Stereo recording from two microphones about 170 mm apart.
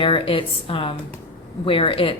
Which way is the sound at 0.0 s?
30° left (ahead or behind).